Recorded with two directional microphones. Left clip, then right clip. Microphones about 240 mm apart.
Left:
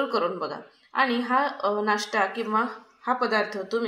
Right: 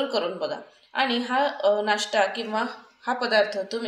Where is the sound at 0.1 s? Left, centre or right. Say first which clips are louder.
Even; left.